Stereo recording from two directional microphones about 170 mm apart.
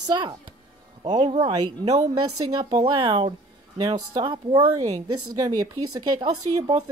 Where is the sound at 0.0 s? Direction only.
25° right (ahead or behind).